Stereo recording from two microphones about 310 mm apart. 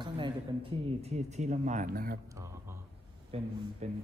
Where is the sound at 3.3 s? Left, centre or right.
Centre.